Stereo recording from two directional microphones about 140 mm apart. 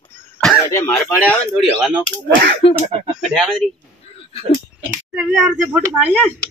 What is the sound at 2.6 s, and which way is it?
Speech, 45° left (ahead or behind).